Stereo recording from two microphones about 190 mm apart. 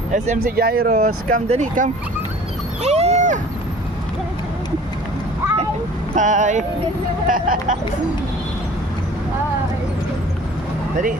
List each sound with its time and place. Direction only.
0.1 s speech: 50° right (ahead or behind)
0.9 s speech: 35° right (ahead or behind)
6.1 s speech: 40° right (ahead or behind)